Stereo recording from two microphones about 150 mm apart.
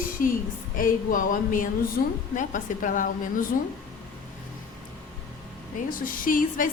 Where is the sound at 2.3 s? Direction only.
60° left (ahead or behind).